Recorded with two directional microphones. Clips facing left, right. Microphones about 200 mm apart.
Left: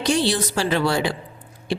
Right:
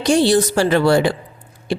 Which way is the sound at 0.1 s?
45° right (ahead or behind).